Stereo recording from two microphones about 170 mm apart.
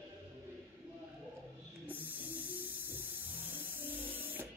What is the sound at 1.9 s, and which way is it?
Spray, 10° right (ahead or behind).